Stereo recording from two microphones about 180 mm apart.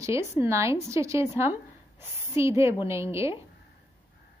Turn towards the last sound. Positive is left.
turn(degrees=-15)  # may be behind; listen again after turning